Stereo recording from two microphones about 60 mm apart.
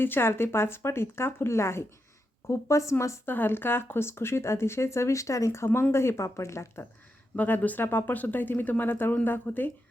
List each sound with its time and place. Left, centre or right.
0.0 s speech: left
3.2 s speech: left
7.3 s speech: left